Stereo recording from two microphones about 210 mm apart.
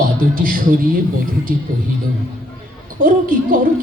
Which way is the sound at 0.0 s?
40° right (ahead or behind).